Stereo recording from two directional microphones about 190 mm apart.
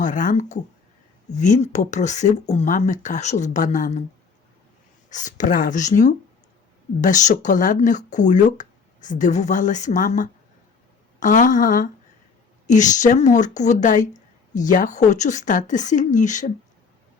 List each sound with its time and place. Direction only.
0.0 s speech: 40° left (ahead or behind)
5.0 s a woman's voice: 40° left (ahead or behind)